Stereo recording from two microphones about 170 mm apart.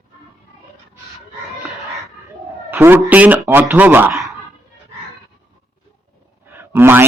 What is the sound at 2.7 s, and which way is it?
Speech, 10° right (ahead or behind).